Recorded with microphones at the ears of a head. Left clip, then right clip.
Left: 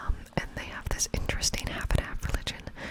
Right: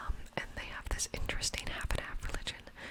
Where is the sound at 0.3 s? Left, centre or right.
Left.